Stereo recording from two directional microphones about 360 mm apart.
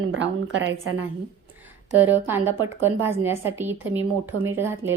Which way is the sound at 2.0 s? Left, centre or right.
Centre.